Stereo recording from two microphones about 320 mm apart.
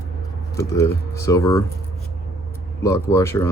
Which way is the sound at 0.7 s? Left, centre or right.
Centre.